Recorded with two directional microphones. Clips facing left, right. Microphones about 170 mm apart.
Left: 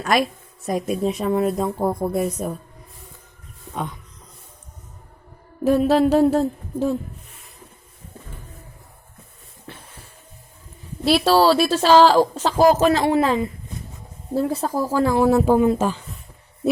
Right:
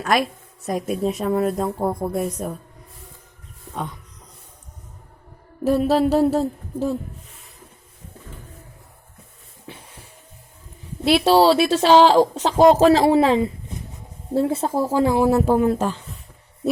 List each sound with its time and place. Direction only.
0.0 s a woman's voice: centre (ahead or behind)
5.6 s a woman's voice: centre (ahead or behind)
11.0 s speech: 20° right (ahead or behind)
15.3 s a woman's voice: centre (ahead or behind)